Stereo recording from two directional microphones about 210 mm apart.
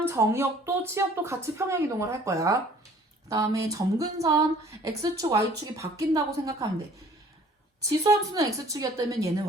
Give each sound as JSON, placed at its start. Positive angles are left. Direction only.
{"t": 0.0, "sound": "a woman's voice", "side_deg": -10}
{"t": 7.8, "sound": "a woman's voice", "side_deg": -15}